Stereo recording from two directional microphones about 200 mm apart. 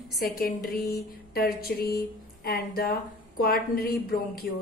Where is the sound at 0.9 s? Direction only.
50° left (ahead or behind).